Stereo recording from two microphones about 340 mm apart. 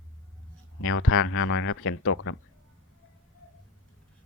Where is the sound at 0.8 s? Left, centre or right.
Left.